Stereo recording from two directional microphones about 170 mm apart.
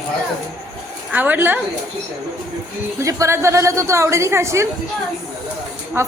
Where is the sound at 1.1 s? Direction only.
10° right (ahead or behind).